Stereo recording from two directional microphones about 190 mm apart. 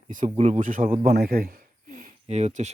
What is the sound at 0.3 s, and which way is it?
A man's voice, 40° right (ahead or behind).